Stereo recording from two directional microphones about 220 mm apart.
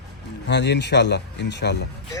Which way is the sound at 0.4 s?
50° left (ahead or behind).